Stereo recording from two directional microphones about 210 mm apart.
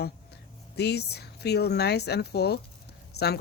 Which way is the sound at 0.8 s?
50° left (ahead or behind).